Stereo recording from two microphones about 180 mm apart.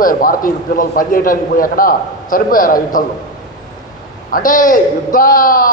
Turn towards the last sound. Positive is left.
turn(degrees=50)  # may be behind; listen again after turning